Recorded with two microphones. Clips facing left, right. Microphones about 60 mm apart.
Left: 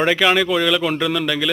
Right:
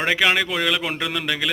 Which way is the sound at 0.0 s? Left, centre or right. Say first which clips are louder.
Left 4 dB; centre.